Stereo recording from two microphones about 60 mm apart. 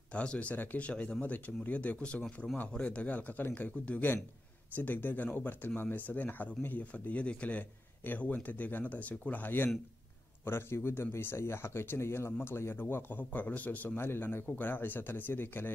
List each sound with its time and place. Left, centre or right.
0.1 s a man's voice: centre
10.4 s a man's voice: left